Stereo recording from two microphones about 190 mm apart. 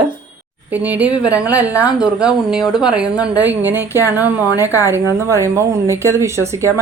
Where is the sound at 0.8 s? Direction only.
10° right (ahead or behind).